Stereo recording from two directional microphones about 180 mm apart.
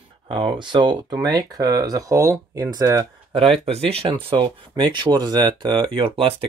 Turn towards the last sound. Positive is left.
turn(degrees=-30)  # may be behind; listen again after turning